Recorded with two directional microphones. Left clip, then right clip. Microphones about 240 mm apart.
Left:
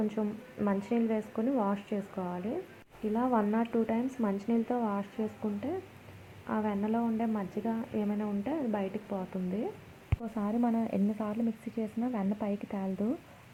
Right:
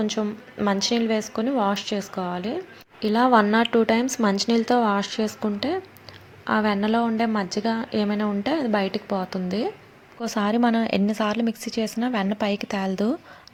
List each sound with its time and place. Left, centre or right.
0.0 s a woman's voice: right
3.1 s a woman's voice: right